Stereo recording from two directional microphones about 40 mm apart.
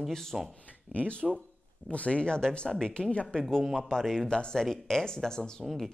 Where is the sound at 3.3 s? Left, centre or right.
Centre.